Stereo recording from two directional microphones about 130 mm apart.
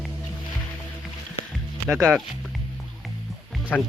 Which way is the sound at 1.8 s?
5° right (ahead or behind).